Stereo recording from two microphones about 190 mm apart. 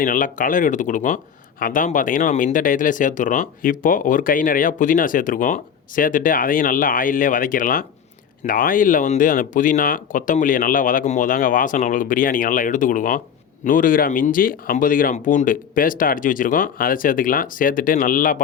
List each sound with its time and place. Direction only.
0.0 s speech: 45° left (ahead or behind)